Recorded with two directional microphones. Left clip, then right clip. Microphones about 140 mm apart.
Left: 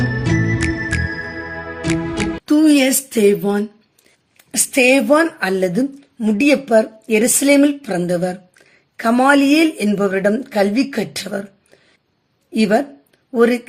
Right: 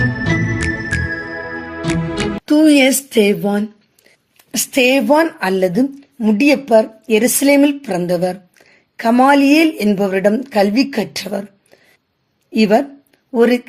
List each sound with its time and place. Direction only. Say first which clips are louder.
0.6 s music: right 1 dB; centre (ahead or behind)
2.5 s a woman's voice: right 3 dB; 25° right (ahead or behind)